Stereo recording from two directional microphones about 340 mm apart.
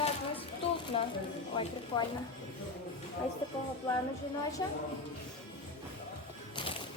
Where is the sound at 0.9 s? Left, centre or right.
Centre.